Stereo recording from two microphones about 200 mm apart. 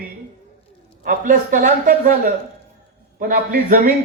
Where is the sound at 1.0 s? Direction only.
40° right (ahead or behind).